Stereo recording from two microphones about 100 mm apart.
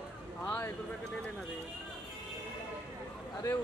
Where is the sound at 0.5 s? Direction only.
20° left (ahead or behind).